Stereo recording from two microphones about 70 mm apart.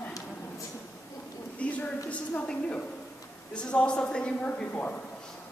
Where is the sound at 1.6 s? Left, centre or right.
Left.